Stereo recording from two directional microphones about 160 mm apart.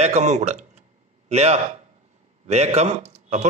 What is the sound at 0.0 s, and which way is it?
A man's voice, 45° right (ahead or behind).